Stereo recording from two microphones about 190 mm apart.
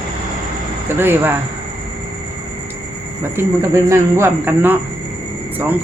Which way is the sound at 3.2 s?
10° right (ahead or behind).